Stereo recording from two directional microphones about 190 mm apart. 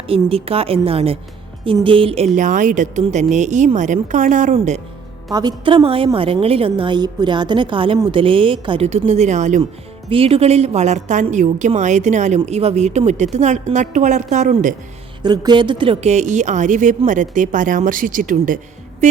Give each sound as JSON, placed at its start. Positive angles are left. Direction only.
{"t": 0.1, "sound": "a woman's voice", "side_deg": -30}
{"t": 5.3, "sound": "a woman's voice", "side_deg": -20}
{"t": 15.2, "sound": "a woman's voice", "side_deg": -20}